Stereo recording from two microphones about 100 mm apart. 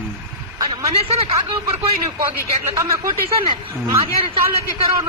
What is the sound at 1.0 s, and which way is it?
Speech, 85° right.